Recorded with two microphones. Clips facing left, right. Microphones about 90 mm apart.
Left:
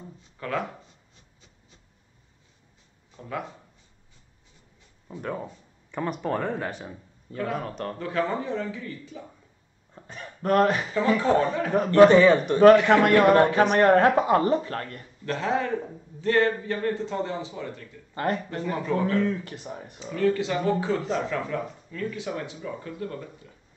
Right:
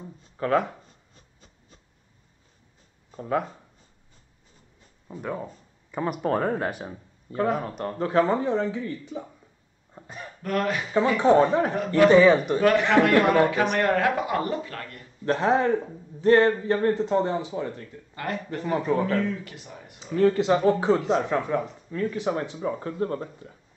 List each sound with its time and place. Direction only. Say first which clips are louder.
0.2 s writing: right 7 dB; 40° right (ahead or behind)
3.1 s speech: right 7 dB; 40° right (ahead or behind)
5.2 s a man's voice: right 1 dB; 5° right (ahead or behind)
7.3 s speech: right 4 dB; 30° right (ahead or behind)
9.9 s speech: right 2 dB; 5° right (ahead or behind)
10.4 s speech: left 5 dB; 35° left (ahead or behind)
11.1 s speech: right 4 dB; 30° right (ahead or behind)
12.1 s a man's voice: right 1 dB; centre (ahead or behind)
12.5 s speech: left 4 dB; 35° left (ahead or behind)
15.2 s speech: right 5 dB; 35° right (ahead or behind)
18.1 s speech: left 3 dB; 35° left (ahead or behind)
18.6 s speech: right 6 dB; 35° right (ahead or behind)
19.2 s speech: left 3 dB; 35° left (ahead or behind)
20.2 s speech: right 4 dB; 35° right (ahead or behind)